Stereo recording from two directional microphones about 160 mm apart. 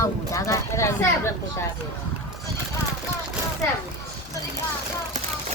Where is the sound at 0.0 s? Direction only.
20° left (ahead or behind).